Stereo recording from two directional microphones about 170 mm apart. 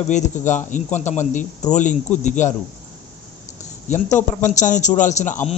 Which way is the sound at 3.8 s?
45° left (ahead or behind).